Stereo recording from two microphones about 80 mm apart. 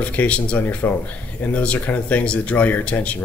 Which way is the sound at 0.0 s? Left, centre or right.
Centre.